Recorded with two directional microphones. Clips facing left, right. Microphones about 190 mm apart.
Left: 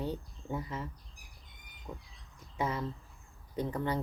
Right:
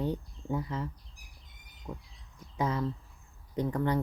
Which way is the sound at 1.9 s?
5° right (ahead or behind).